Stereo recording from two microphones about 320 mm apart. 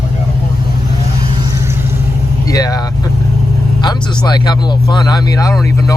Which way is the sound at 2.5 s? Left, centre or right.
Centre.